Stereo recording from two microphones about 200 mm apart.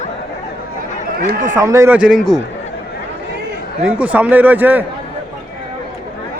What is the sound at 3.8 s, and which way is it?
A man's voice, 5° right (ahead or behind).